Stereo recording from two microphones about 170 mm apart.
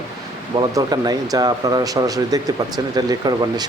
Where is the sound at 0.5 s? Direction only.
25° right (ahead or behind).